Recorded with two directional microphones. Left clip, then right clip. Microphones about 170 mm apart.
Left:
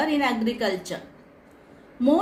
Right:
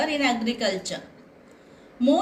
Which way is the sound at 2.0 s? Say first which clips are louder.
Even; 45° left (ahead or behind).